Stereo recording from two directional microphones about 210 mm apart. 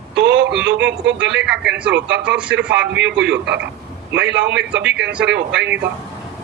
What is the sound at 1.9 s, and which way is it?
Speech, 60° right (ahead or behind).